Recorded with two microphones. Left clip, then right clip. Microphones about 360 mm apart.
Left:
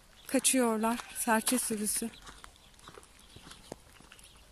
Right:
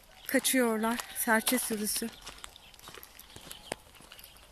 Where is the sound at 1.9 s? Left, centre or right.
Centre.